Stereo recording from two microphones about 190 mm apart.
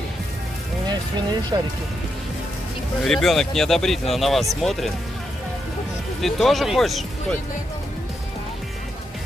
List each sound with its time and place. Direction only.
1.5 s speech: 20° right (ahead or behind)
3.0 s speech: centre (ahead or behind)
6.2 s speech: centre (ahead or behind)